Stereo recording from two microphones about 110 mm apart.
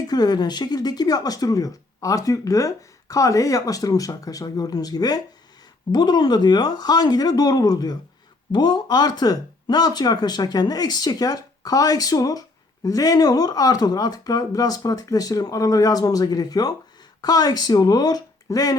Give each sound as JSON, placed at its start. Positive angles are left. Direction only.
{"t": 0.1, "sound": "speech", "side_deg": 40}